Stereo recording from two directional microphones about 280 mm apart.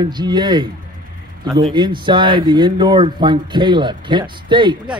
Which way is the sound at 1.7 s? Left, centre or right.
Centre.